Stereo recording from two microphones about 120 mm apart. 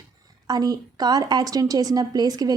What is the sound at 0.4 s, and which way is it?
A woman's voice, 35° right (ahead or behind).